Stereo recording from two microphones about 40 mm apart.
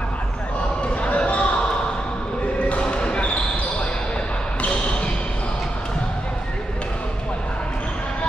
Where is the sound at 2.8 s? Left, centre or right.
Left.